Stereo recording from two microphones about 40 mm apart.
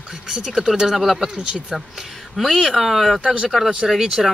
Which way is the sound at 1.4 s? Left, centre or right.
Centre.